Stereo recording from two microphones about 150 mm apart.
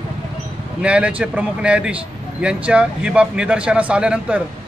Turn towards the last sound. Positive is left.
turn(degrees=-5)  # may be behind; listen again after turning